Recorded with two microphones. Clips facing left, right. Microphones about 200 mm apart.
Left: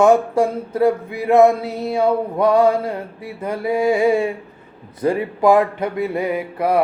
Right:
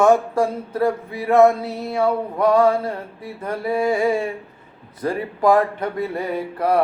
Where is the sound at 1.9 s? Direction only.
20° left (ahead or behind).